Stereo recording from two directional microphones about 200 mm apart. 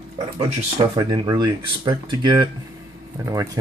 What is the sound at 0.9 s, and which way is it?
Speech, 20° right (ahead or behind).